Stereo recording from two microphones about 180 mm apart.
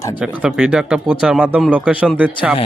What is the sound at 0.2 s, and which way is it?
Speech, 5° right (ahead or behind).